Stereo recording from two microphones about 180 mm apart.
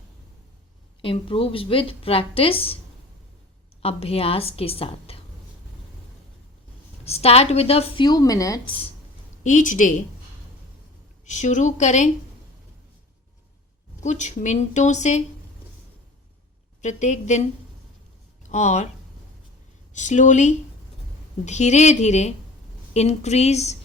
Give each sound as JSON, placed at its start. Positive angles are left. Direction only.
{"t": 1.0, "sound": "a woman's voice", "side_deg": 30}
{"t": 3.8, "sound": "a woman's voice", "side_deg": 35}
{"t": 7.0, "sound": "a woman's voice", "side_deg": 35}
{"t": 9.4, "sound": "speech", "side_deg": 45}
{"t": 11.3, "sound": "speech", "side_deg": 45}
{"t": 14.0, "sound": "a woman's voice", "side_deg": 40}
{"t": 16.8, "sound": "a woman's voice", "side_deg": 40}
{"t": 18.4, "sound": "speech", "side_deg": 40}
{"t": 19.9, "sound": "a woman's voice", "side_deg": 45}